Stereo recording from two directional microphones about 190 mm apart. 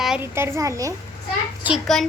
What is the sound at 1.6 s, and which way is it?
Speech, centre (ahead or behind).